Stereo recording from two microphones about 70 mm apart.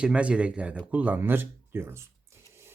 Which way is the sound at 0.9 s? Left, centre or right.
Right.